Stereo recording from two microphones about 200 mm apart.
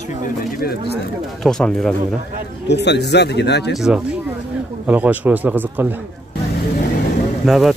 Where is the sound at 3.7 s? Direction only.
5° right (ahead or behind).